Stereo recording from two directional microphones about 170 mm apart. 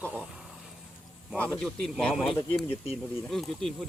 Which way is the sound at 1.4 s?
5° left (ahead or behind).